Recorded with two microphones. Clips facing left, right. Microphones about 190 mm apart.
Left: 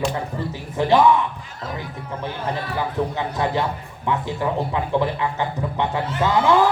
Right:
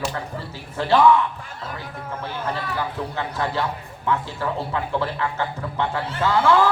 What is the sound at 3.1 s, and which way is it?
A man's voice, 15° left (ahead or behind).